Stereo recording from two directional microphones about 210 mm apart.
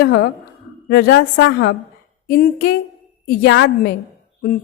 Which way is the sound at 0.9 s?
45° left (ahead or behind).